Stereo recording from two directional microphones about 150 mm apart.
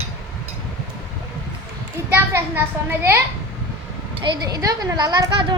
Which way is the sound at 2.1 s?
15° right (ahead or behind).